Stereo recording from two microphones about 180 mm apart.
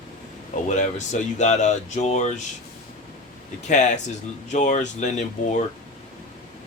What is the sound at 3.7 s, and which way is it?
Speech, 40° left (ahead or behind).